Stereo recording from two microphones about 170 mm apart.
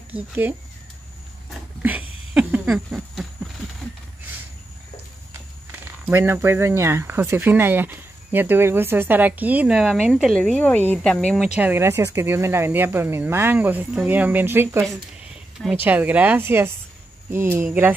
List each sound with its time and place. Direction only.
0.1 s speech: 10° right (ahead or behind)
1.8 s a sound: 10° right (ahead or behind)
6.0 s speech: 10° right (ahead or behind)